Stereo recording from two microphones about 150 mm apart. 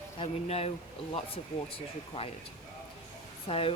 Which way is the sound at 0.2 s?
45° left (ahead or behind).